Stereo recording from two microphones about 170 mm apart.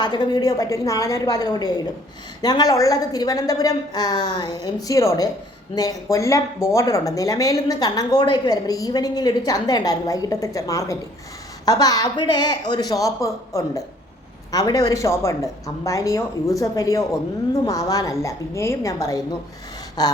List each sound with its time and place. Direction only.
0.0 s speech: 25° left (ahead or behind)